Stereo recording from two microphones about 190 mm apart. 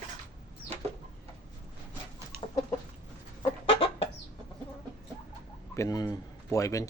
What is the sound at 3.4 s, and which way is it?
Chicken, 30° left (ahead or behind).